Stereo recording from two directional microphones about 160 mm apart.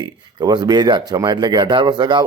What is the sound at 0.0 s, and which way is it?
Speech, 25° right (ahead or behind).